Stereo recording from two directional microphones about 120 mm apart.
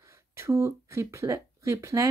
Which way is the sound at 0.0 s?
25° right (ahead or behind).